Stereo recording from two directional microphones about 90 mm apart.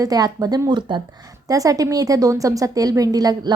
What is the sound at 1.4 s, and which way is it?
A woman's voice, 40° right (ahead or behind).